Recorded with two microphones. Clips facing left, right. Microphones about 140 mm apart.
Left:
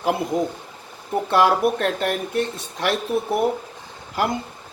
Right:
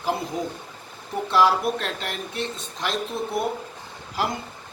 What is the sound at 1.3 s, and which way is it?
Speech, 50° left (ahead or behind).